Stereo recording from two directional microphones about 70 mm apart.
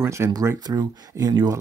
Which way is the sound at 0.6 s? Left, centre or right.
Right.